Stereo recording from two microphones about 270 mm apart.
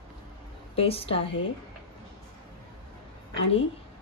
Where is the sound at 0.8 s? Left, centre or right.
Left.